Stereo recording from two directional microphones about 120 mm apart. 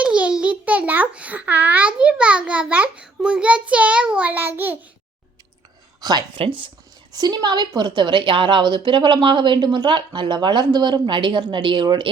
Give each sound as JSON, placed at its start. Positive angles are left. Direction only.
{"t": 0.0, "sound": "a child's voice", "side_deg": -10}
{"t": 6.0, "sound": "a woman's voice", "side_deg": -35}